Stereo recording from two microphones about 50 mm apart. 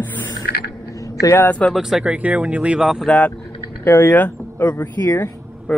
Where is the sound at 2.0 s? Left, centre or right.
Right.